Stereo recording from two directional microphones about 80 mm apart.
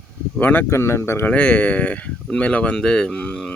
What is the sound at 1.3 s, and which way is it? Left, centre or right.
Speech, centre.